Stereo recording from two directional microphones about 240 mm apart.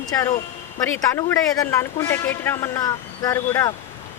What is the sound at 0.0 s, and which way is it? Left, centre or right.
A man's voice, centre.